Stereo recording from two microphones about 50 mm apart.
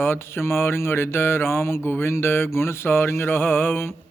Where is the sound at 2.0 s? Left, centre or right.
Left.